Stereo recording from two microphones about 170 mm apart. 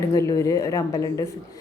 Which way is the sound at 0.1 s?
20° left (ahead or behind).